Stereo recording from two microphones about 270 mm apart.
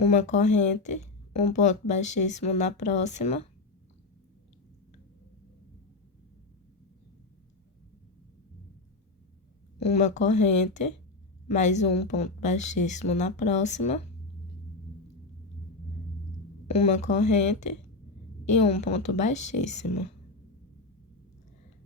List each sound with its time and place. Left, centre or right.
0.0 s a woman's voice: left
9.8 s a woman's voice: left
16.6 s a woman's voice: left